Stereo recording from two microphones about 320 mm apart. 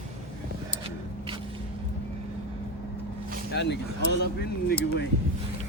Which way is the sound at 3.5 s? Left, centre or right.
Left.